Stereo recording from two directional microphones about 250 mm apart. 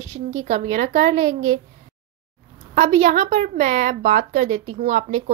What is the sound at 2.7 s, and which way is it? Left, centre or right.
A woman's voice, right.